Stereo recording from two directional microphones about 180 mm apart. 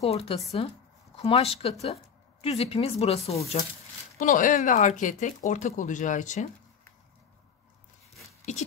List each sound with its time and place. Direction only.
0.0 s speech: 35° left (ahead or behind)
4.2 s speech: 45° left (ahead or behind)
8.5 s speech: 40° left (ahead or behind)